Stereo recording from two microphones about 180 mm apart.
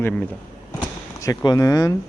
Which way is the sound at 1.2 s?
20° left (ahead or behind).